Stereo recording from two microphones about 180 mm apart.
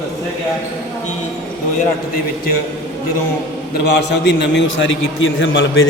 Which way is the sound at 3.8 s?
70° left (ahead or behind).